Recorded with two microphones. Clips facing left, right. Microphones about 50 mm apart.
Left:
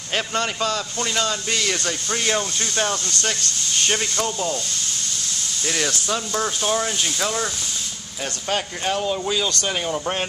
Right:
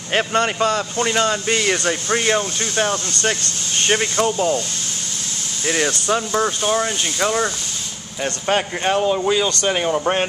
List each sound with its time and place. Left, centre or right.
0.1 s a man's voice: right
5.7 s a man's voice: centre